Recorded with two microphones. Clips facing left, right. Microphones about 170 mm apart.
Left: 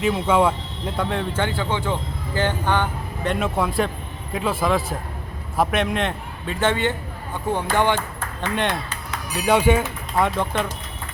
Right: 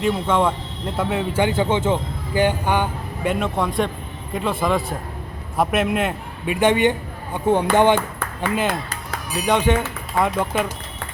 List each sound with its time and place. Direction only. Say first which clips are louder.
0.0 s speech: left 1 dB; 5° left (ahead or behind); by 3.3 s 10° right (ahead or behind)
3.3 s a man's voice: left 1 dB; 5° left (ahead or behind); by 7.7 s 15° right (ahead or behind)
8.5 s a man's voice: right 1 dB; 5° right (ahead or behind)
9.4 s speech: left 1 dB; 5° left (ahead or behind)
10.2 s a man's voice: right 1 dB; centre (ahead or behind)